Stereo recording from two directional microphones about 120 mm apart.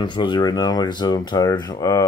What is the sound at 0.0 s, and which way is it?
Speech, 40° left (ahead or behind).